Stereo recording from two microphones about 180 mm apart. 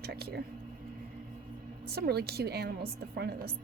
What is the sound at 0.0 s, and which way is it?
Speech, 60° right (ahead or behind).